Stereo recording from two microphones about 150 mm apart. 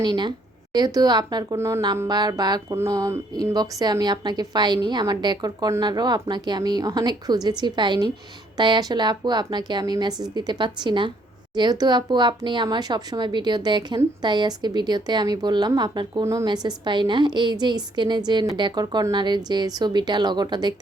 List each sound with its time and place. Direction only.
0.0 s a woman's voice: 30° right (ahead or behind)